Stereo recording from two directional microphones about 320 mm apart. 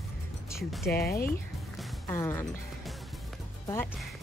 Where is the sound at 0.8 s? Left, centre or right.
Left.